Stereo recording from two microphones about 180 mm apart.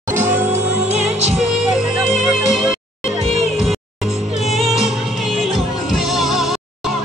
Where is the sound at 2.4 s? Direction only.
Centre (ahead or behind).